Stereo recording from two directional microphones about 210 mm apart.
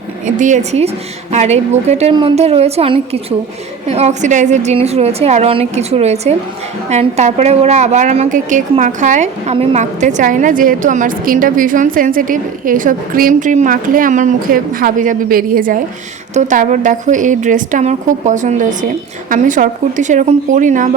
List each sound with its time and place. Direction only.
0.3 s a woman's voice: 35° right (ahead or behind)